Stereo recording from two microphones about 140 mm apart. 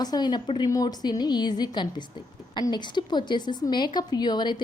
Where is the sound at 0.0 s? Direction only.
30° left (ahead or behind).